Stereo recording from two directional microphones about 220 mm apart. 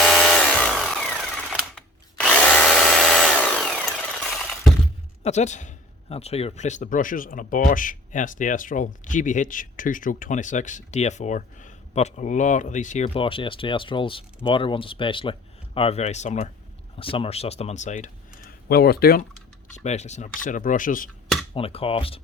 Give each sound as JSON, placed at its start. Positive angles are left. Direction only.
{"t": 0.0, "sound": "a sound", "side_deg": 0}
{"t": 5.2, "sound": "a man's voice", "side_deg": 30}
{"t": 19.7, "sound": "a man's voice", "side_deg": 30}
{"t": 21.5, "sound": "speech", "side_deg": 25}